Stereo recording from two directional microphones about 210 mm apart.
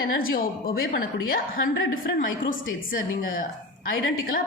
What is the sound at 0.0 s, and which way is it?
A woman's voice, 45° left (ahead or behind).